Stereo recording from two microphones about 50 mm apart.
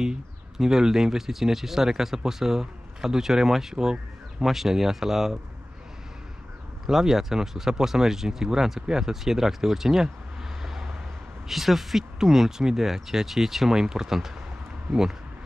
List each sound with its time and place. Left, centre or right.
0.0 s speech: centre
6.9 s speech: centre
10.6 s vehicle: centre
11.4 s speech: centre